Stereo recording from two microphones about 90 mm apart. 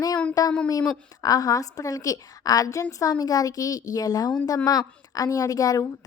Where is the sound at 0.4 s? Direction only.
40° left (ahead or behind).